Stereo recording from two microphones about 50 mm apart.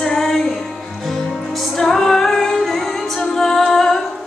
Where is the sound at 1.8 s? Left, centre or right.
Centre.